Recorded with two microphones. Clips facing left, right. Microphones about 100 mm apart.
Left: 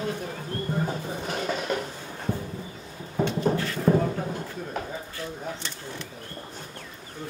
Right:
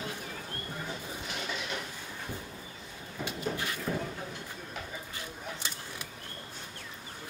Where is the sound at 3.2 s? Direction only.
45° left (ahead or behind).